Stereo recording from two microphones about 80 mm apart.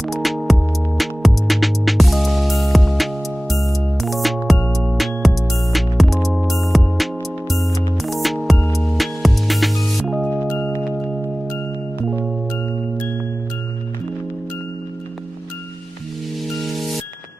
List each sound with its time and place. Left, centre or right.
0.0 s music: centre
10.2 s music: centre
16.5 s music: centre